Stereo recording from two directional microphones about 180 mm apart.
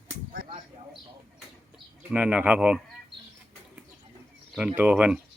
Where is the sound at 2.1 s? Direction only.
10° right (ahead or behind).